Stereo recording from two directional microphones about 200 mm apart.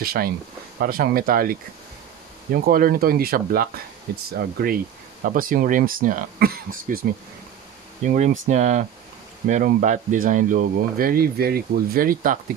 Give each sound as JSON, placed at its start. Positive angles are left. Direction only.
{"t": 0.0, "sound": "speech", "side_deg": -50}